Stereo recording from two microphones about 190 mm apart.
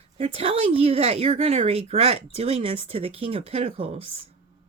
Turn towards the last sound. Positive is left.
turn(degrees=-35)  # may be behind; listen again after turning